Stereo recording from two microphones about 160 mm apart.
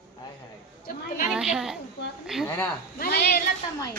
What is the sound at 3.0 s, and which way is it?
Speech, 80° left.